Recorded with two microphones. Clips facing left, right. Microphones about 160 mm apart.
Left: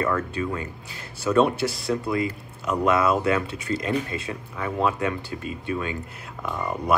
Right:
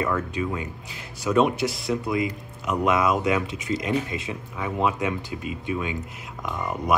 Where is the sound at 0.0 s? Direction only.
10° right (ahead or behind).